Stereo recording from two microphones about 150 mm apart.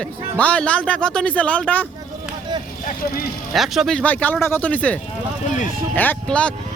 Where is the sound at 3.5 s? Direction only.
Centre (ahead or behind).